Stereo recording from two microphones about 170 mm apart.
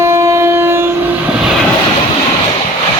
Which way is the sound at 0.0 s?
15° right (ahead or behind).